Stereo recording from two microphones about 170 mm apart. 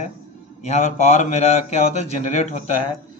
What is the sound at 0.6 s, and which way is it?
Speech, 40° left (ahead or behind).